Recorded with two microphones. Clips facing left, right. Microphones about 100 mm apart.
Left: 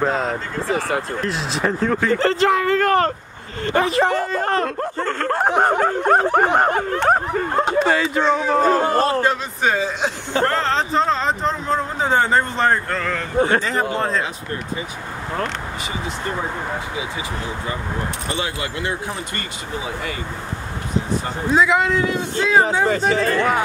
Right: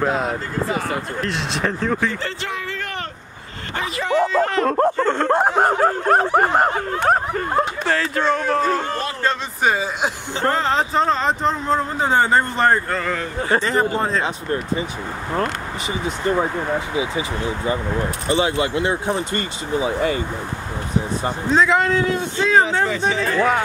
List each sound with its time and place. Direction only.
0.0 s speech: 5° right (ahead or behind)
2.1 s speech: 45° left (ahead or behind)
2.5 s a sound: 50° left (ahead or behind)
3.7 s speech: 45° left (ahead or behind)
4.6 s speech: 45° right (ahead or behind)
5.0 s speech: 20° right (ahead or behind)
5.6 s a man's voice: 5° right (ahead or behind)
9.6 s speech: 10° right (ahead or behind)
18.3 s speech: 25° right (ahead or behind)
21.5 s speech: 5° left (ahead or behind)
22.8 s speech: 50° left (ahead or behind)
23.3 s speech: centre (ahead or behind)